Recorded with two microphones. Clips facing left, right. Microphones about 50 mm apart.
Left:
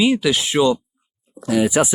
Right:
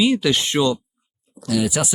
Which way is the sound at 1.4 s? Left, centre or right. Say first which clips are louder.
Left 4 dB; left.